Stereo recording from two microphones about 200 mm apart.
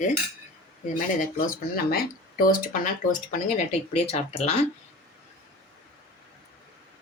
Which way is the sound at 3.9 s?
30° left (ahead or behind).